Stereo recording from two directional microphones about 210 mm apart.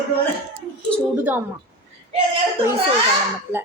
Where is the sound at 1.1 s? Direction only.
10° right (ahead or behind).